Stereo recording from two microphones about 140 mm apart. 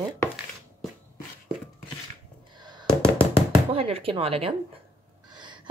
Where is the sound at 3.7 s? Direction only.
45° right (ahead or behind).